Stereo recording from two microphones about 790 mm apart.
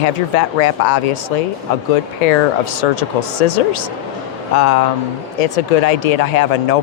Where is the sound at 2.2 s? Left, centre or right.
Left.